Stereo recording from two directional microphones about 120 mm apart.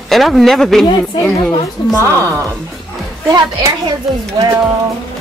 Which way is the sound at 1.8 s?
40° left (ahead or behind).